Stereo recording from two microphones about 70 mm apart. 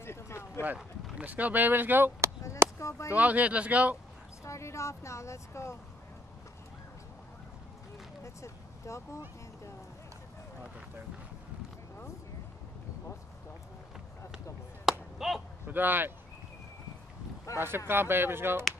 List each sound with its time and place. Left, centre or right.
0.0 s a sound: left
0.7 s a sound: centre
1.2 s speech: right
2.8 s speech: left
3.1 s speech: right
4.5 s speech: left
8.2 s speech: left
14.9 s a sound: centre
15.6 s speech: right
17.6 s speech: right